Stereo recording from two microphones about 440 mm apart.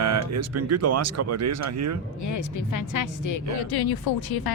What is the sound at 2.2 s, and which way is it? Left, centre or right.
A woman's voice, left.